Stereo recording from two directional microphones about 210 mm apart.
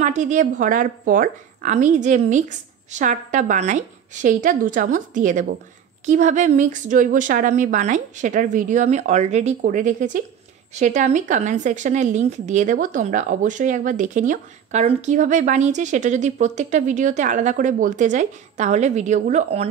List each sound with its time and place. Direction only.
0.0 s speech: 35° right (ahead or behind)